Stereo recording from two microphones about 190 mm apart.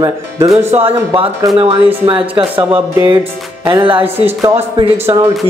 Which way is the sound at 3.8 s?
25° right (ahead or behind).